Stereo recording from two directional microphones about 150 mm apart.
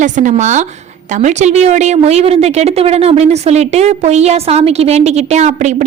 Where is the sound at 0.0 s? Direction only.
55° right (ahead or behind).